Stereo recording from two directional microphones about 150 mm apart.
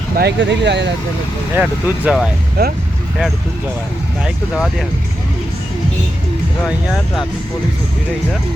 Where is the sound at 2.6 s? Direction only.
90° right.